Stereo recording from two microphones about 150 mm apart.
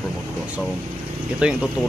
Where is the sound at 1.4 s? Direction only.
5° right (ahead or behind).